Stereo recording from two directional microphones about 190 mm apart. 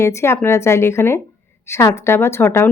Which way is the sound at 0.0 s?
15° left (ahead or behind).